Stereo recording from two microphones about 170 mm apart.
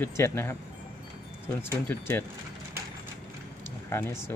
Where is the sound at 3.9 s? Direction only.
15° left (ahead or behind).